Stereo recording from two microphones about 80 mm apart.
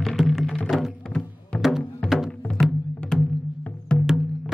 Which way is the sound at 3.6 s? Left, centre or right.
Centre.